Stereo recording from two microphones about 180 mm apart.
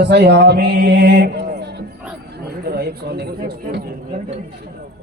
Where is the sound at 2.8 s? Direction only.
60° right (ahead or behind).